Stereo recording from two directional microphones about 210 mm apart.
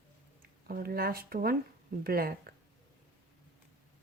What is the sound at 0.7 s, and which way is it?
Speech, 45° right (ahead or behind).